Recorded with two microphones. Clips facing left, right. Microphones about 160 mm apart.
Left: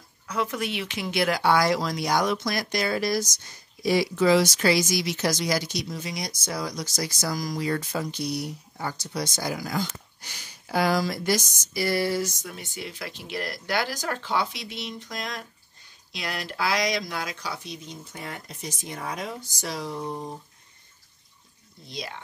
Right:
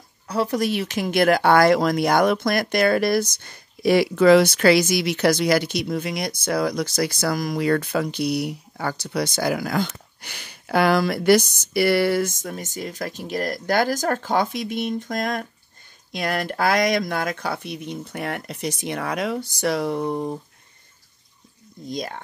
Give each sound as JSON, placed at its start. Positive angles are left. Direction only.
{"t": 0.3, "sound": "speech", "side_deg": -35}
{"t": 21.8, "sound": "speech", "side_deg": -45}